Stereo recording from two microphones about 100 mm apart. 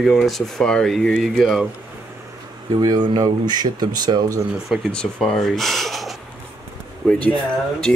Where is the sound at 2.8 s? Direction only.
40° right (ahead or behind).